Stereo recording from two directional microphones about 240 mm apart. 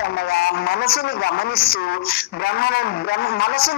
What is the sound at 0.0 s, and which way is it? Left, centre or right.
A man's voice, left.